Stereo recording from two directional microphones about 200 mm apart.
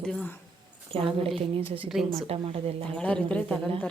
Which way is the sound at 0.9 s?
25° right (ahead or behind).